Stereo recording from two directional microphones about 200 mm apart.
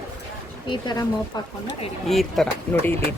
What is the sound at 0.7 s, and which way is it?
Speech, 20° left (ahead or behind).